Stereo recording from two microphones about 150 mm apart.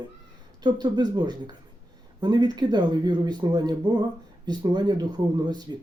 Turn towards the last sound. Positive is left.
turn(degrees=-30)  # may be behind; listen again after turning